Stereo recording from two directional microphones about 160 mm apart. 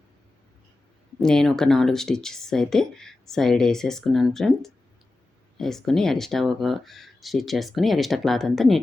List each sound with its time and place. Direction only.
1.2 s speech: 5° left (ahead or behind)